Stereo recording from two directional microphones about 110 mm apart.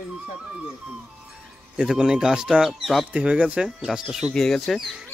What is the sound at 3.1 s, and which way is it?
Speech, 10° right (ahead or behind).